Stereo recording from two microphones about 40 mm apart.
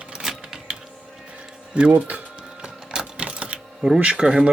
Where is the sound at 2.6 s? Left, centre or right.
Right.